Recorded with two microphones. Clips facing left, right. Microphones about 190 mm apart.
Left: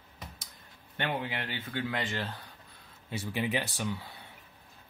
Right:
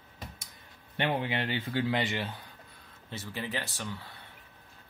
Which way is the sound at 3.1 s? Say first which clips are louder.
Left 5 dB; 15° left (ahead or behind).